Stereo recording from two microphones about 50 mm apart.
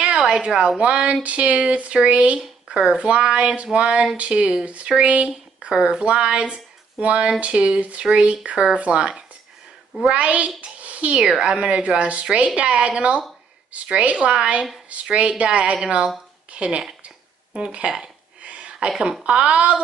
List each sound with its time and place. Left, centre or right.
0.3 s speech: centre
17.6 s a sound: centre
18.9 s speech: centre